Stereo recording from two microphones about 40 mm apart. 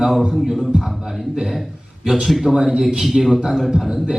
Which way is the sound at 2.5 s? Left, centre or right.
Centre.